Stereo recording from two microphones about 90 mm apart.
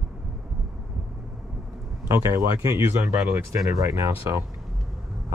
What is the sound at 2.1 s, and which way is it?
Speech, 35° right (ahead or behind).